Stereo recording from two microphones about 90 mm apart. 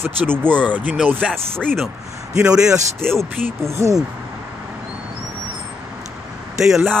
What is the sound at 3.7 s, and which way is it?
Speech, 35° right (ahead or behind).